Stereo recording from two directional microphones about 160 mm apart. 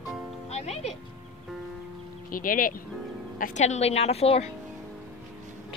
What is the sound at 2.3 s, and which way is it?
A woman's voice, 60° left (ahead or behind).